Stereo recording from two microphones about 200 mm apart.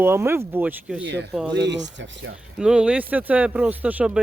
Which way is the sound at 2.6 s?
5° right (ahead or behind).